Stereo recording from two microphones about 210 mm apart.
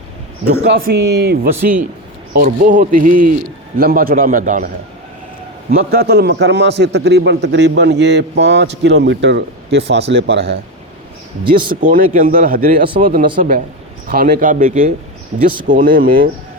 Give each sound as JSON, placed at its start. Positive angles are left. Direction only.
{"t": 0.4, "sound": "speech", "side_deg": -50}
{"t": 5.7, "sound": "a man's voice", "side_deg": -50}
{"t": 11.7, "sound": "speech", "side_deg": -40}